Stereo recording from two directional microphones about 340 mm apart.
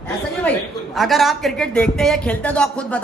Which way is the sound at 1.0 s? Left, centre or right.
Centre.